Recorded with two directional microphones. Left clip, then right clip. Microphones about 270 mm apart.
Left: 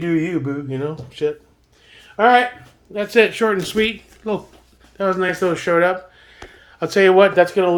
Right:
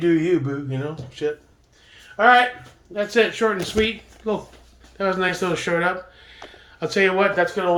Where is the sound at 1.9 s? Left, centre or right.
Left.